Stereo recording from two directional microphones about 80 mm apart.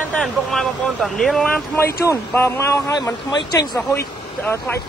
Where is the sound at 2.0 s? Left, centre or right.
Left.